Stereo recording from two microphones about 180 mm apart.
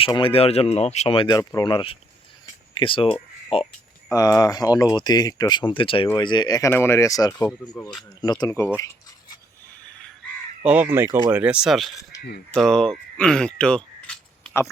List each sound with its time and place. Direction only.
0.0 s speech: 30° left (ahead or behind)
4.1 s speech: 20° left (ahead or behind)
10.7 s speech: 10° right (ahead or behind)
12.1 s crow: 20° left (ahead or behind)
12.5 s speech: centre (ahead or behind)